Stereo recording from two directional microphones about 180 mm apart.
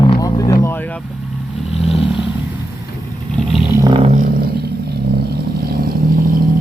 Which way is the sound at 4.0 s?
40° right (ahead or behind).